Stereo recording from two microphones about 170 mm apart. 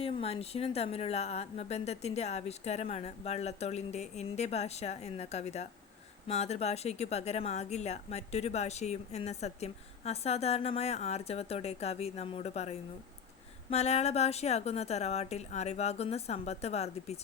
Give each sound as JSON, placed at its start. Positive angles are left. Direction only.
{"t": 0.0, "sound": "speech", "side_deg": 35}